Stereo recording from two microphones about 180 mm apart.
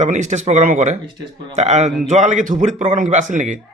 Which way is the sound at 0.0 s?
40° right (ahead or behind).